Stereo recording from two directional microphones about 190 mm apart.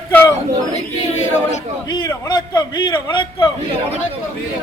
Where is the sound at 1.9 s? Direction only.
20° left (ahead or behind).